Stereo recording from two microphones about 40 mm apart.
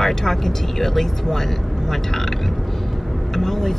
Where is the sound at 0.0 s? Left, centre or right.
Centre.